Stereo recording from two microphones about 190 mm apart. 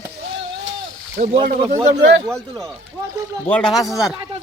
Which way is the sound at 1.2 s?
50° right (ahead or behind).